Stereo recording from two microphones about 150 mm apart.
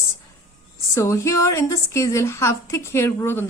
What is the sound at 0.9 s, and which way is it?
A woman's voice, 20° left (ahead or behind).